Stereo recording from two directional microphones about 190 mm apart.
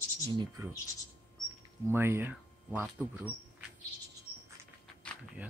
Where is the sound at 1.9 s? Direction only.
10° right (ahead or behind).